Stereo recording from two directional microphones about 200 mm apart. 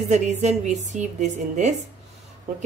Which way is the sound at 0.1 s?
35° right (ahead or behind).